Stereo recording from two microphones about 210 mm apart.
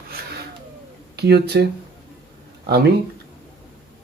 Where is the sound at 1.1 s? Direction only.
50° right (ahead or behind).